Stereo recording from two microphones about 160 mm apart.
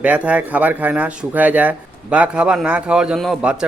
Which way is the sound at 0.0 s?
10° right (ahead or behind).